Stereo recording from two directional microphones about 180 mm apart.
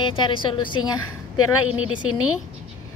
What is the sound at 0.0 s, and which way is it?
Speech, 25° left (ahead or behind).